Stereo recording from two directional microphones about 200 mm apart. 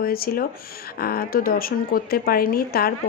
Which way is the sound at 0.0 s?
50° left (ahead or behind).